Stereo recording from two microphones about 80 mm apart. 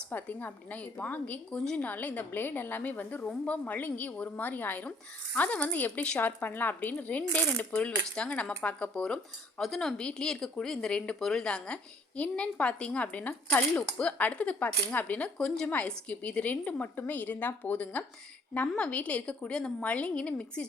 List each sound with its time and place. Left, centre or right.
0.1 s a woman's voice: left